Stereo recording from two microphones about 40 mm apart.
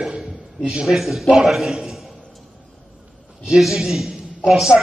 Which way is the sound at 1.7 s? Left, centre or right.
Centre.